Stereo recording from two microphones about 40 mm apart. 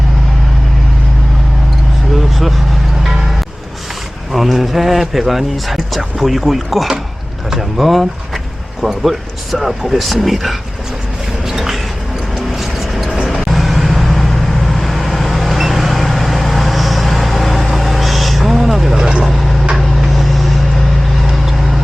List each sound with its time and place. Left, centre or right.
2.1 s vehicle: centre
4.3 s speech: centre
11.4 s a sound: centre
12.3 s vehicle: centre
18.9 s vehicle: right
19.2 s vehicle: centre